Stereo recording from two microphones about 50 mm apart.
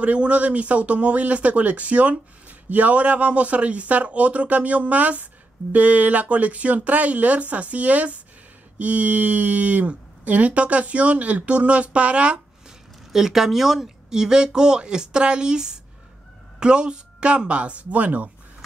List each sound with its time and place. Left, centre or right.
0.0 s speech: right
13.1 s speech: centre; by 18.3 s right